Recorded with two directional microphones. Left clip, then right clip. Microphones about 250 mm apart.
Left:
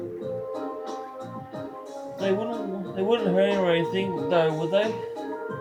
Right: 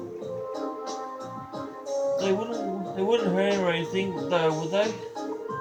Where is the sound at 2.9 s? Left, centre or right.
Centre.